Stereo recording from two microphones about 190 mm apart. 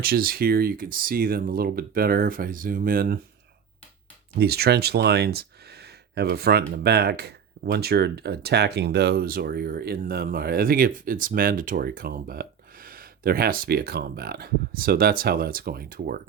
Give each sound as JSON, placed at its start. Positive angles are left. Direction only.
{"t": 0.0, "sound": "speech", "side_deg": -50}
{"t": 4.4, "sound": "speech", "side_deg": -55}